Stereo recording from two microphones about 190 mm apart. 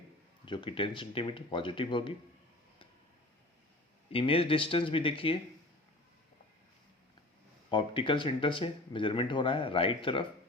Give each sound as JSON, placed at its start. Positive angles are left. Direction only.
{"t": 0.4, "sound": "speech", "side_deg": 25}
{"t": 4.1, "sound": "speech", "side_deg": 30}
{"t": 7.7, "sound": "speech", "side_deg": 25}